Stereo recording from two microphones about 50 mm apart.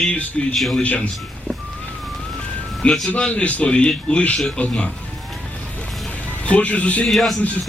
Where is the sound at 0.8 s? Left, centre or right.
Left.